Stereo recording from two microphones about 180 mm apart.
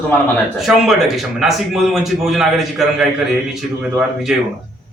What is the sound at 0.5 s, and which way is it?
A man's voice, centre (ahead or behind).